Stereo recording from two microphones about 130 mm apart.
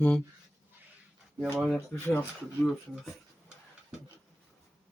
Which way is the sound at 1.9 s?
15° left (ahead or behind).